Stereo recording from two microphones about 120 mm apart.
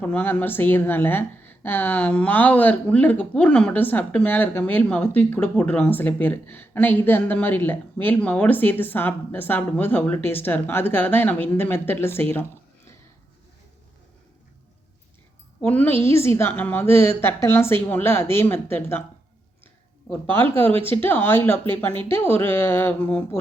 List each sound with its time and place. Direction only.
0.0 s speech: 15° left (ahead or behind)
15.6 s speech: 15° left (ahead or behind)
20.3 s speech: 20° left (ahead or behind)
20.7 s speech: 55° right (ahead or behind)
20.9 s speech: 20° left (ahead or behind)